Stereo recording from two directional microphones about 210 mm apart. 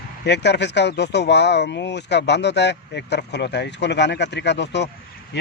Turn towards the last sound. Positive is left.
turn(degrees=55)  # may be behind; listen again after turning